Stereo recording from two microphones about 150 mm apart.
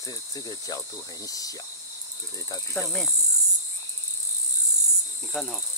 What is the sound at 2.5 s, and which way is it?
Speech, 15° left (ahead or behind).